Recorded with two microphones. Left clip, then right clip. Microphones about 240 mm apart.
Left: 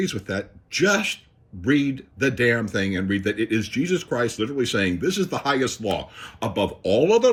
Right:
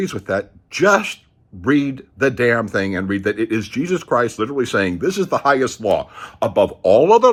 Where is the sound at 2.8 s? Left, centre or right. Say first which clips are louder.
Right 4 dB; right.